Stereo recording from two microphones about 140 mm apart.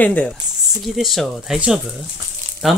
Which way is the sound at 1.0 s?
Centre (ahead or behind).